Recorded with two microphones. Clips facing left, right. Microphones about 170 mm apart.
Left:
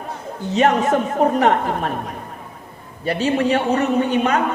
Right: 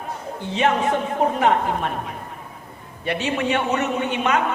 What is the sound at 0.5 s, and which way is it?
A woman's voice, 40° left (ahead or behind).